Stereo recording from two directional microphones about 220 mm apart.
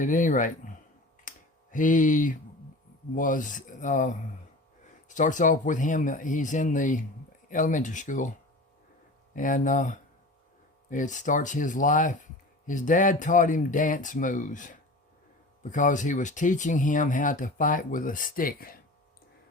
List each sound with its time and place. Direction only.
0.0 s speech: 35° left (ahead or behind)
1.3 s a sound: 35° left (ahead or behind)
1.7 s speech: 35° left (ahead or behind)
9.3 s speech: 35° left (ahead or behind)